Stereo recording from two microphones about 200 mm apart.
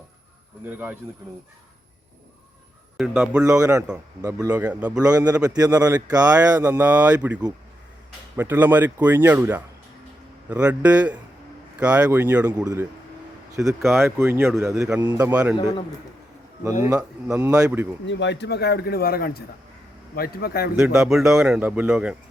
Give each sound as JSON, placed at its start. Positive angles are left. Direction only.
{"t": 0.6, "sound": "speech", "side_deg": -10}
{"t": 3.0, "sound": "speech", "side_deg": -5}
{"t": 3.4, "sound": "speech", "side_deg": -15}
{"t": 5.0, "sound": "speech", "side_deg": -20}
{"t": 6.3, "sound": "speech", "side_deg": -5}
{"t": 8.4, "sound": "speech", "side_deg": -10}
{"t": 15.5, "sound": "a man's voice", "side_deg": 25}
{"t": 17.2, "sound": "speech", "side_deg": -15}
{"t": 18.0, "sound": "a man's voice", "side_deg": 65}
{"t": 20.7, "sound": "speech", "side_deg": -5}